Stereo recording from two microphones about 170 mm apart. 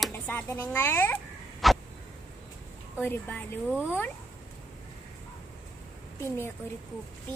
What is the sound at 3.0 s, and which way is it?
Speech, 10° left (ahead or behind).